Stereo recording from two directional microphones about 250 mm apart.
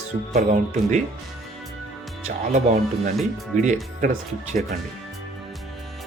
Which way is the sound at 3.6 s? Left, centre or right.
Right.